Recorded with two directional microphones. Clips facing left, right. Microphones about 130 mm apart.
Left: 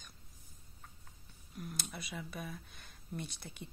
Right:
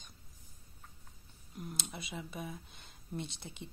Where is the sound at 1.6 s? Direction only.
25° right (ahead or behind).